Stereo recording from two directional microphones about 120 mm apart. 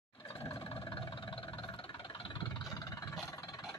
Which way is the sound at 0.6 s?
45° left (ahead or behind).